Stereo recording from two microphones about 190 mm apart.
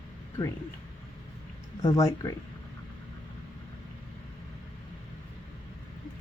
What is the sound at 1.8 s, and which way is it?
Speech, 20° left (ahead or behind).